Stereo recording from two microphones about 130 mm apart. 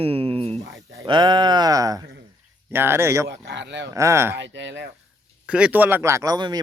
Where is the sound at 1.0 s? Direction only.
35° right (ahead or behind).